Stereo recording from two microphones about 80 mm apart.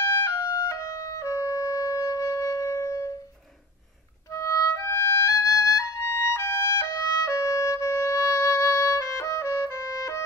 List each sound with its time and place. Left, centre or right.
0.2 s music: left
4.3 s music: left
6.4 s music: left